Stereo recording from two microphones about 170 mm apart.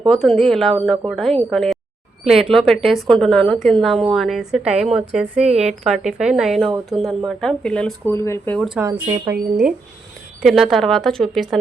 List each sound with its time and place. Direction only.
0.1 s a woman's voice: centre (ahead or behind)
8.8 s speech: 20° right (ahead or behind)
10.4 s a woman's voice: centre (ahead or behind)